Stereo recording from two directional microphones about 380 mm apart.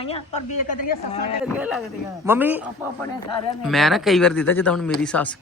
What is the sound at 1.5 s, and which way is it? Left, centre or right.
Speech, centre.